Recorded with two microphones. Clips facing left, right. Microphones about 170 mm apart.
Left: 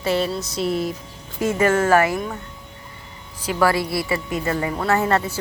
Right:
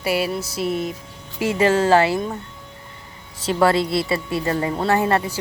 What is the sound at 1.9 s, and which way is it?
Speech, 30° right (ahead or behind).